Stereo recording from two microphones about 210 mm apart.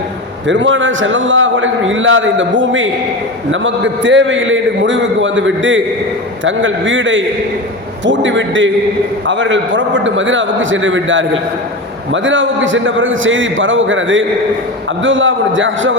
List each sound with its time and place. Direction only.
0.4 s a man's voice: 60° right (ahead or behind)